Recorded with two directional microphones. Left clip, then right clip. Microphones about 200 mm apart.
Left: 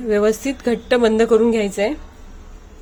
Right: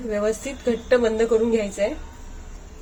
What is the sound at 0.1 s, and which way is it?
A woman's voice, 55° left (ahead or behind).